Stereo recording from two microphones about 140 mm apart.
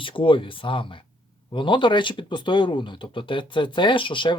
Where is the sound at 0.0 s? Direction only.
40° left (ahead or behind).